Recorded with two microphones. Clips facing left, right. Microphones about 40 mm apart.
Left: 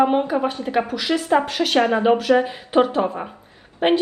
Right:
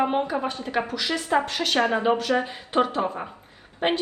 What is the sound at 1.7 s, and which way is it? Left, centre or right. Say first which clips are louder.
Speech: left 5 dB; left.